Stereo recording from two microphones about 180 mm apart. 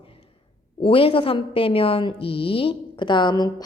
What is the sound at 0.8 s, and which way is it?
A woman's voice, 30° left (ahead or behind).